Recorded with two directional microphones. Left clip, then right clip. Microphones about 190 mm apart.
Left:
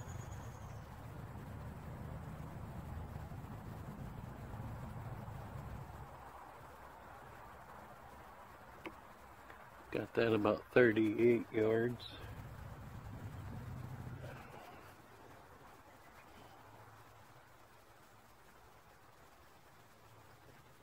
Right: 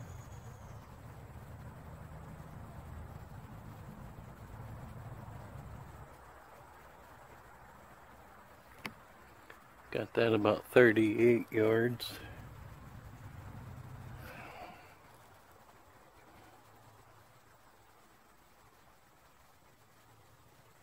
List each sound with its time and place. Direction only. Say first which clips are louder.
9.8 s speech: right 4 dB; 35° right (ahead or behind)